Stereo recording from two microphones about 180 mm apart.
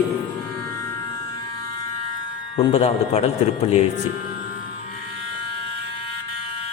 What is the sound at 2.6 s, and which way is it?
Speech, 35° left (ahead or behind).